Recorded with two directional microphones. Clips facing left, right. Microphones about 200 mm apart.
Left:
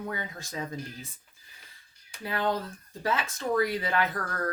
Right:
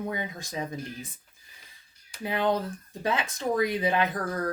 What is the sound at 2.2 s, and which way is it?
Speech, 20° right (ahead or behind).